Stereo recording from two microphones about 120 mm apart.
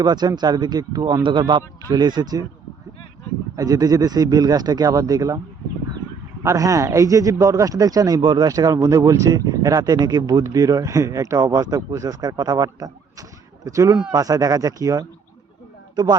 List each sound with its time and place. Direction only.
0.0 s speech: 35° right (ahead or behind)
3.5 s speech: 30° right (ahead or behind)
6.4 s speech: 25° right (ahead or behind)